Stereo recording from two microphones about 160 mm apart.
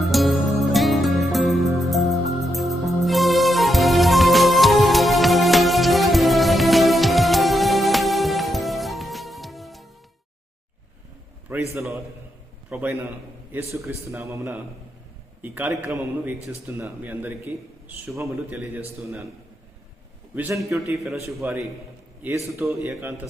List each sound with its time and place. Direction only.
0.0 s music: centre (ahead or behind)
11.4 s a sound: 15° right (ahead or behind)
12.7 s a man's voice: 15° right (ahead or behind)
20.6 s a man's voice: 15° right (ahead or behind)